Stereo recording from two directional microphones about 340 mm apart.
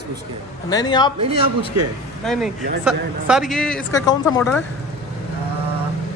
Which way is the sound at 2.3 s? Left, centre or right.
Centre.